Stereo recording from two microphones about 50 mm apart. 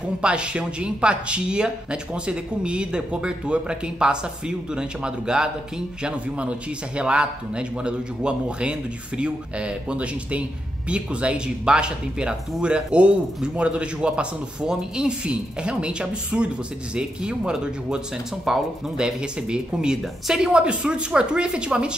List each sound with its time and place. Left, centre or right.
0.2 s speech: right